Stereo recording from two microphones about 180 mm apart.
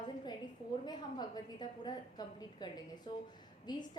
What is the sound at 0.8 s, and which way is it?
A woman's voice, 25° left (ahead or behind).